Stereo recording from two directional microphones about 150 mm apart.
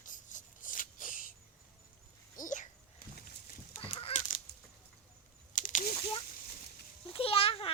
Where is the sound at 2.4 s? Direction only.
60° left (ahead or behind).